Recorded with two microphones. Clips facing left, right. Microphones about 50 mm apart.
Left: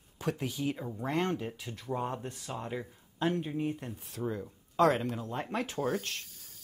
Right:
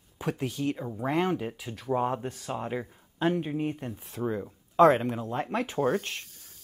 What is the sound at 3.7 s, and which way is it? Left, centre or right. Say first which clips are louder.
Speech: right 4 dB; centre.